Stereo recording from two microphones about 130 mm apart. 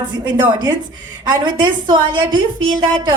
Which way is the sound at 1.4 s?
35° right (ahead or behind).